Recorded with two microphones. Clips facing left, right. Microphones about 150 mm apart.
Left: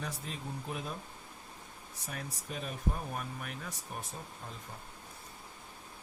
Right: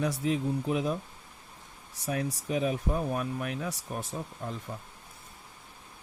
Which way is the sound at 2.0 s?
75° right (ahead or behind).